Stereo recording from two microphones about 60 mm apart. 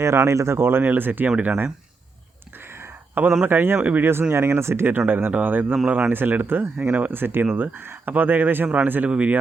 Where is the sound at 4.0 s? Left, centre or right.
Right.